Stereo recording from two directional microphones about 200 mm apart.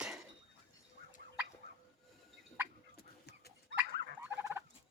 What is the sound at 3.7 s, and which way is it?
Dog, 60° right (ahead or behind).